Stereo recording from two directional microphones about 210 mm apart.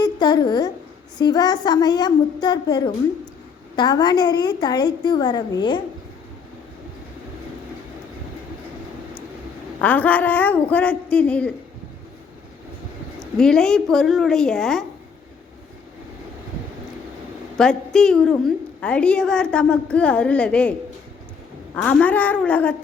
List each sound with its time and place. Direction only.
0.0 s a sound: 20° left (ahead or behind)
1.2 s a woman's voice: 20° left (ahead or behind)
9.8 s speech: 5° left (ahead or behind)
13.3 s a woman's voice: 5° left (ahead or behind)
17.6 s a woman's voice: 5° left (ahead or behind)
21.8 s speech: 5° left (ahead or behind)